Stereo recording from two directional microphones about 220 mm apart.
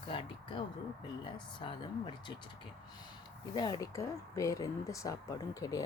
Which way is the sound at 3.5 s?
20° left (ahead or behind).